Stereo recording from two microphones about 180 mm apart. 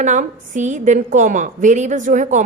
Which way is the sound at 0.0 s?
45° right (ahead or behind).